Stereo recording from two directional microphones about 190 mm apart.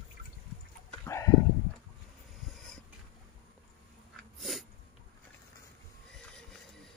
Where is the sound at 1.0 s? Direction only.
15° left (ahead or behind).